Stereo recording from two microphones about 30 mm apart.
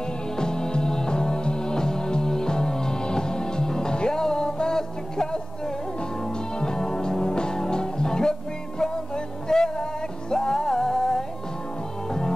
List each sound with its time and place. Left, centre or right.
0.4 s music: left